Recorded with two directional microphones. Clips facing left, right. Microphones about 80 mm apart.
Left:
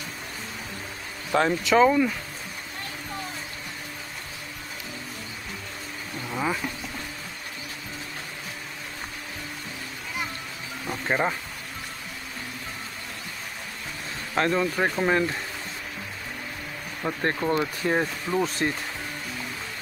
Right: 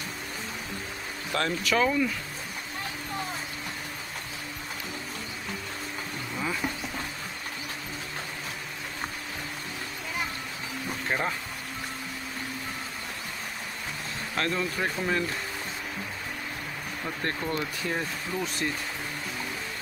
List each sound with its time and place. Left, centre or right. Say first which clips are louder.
1.3 s speech: left 6 dB; left
11.1 s speech: left 5 dB; left
14.3 s speech: left 6 dB; left
14.6 s speech: left 5 dB; left
17.0 s speech: left 6 dB; left
17.6 s speech: left 6 dB; left